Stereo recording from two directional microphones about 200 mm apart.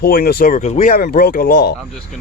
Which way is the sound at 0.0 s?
50° left (ahead or behind).